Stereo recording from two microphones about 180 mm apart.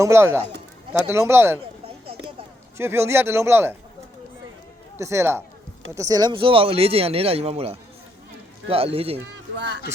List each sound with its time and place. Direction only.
0.0 s a man's voice: 15° right (ahead or behind)
2.7 s a man's voice: 15° right (ahead or behind)
4.9 s a man's voice: 15° right (ahead or behind); by 9.2 s 35° right (ahead or behind)
9.6 s speech: 70° right (ahead or behind)